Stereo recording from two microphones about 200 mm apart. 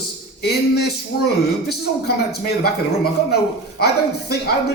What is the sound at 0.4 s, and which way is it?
A man's voice, 55° left (ahead or behind).